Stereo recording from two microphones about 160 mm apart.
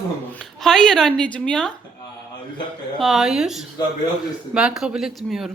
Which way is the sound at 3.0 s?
Centre (ahead or behind).